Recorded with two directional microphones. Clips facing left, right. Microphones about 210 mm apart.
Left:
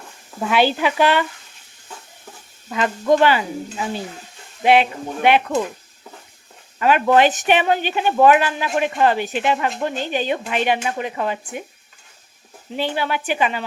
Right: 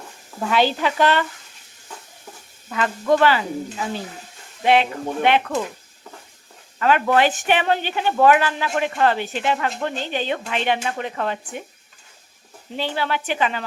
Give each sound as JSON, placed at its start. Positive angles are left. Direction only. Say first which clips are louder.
{"t": 0.5, "sound": "a man's voice", "louder": "left 2 dB", "side_deg": 10}
{"t": 2.7, "sound": "a man's voice", "louder": "left 2 dB", "side_deg": 20}
{"t": 4.6, "sound": "a man's voice", "louder": "left 2 dB", "side_deg": 15}
{"t": 6.7, "sound": "a man's voice", "louder": "left 3 dB", "side_deg": 15}
{"t": 12.7, "sound": "a man's voice", "louder": "left 2 dB", "side_deg": 15}